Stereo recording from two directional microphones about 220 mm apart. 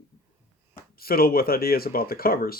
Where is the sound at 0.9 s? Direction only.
45° left (ahead or behind).